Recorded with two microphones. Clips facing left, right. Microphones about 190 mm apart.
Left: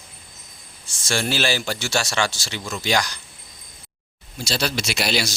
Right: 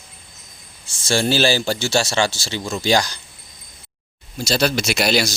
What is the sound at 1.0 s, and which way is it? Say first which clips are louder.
Speech: right 5 dB; 30° right (ahead or behind).